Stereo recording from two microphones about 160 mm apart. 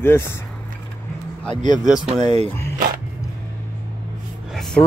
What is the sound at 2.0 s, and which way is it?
Speech, 40° right (ahead or behind).